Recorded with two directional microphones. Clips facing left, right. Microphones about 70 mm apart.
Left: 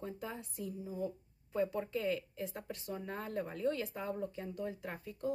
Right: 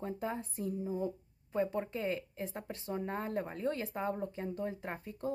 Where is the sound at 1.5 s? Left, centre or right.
Right.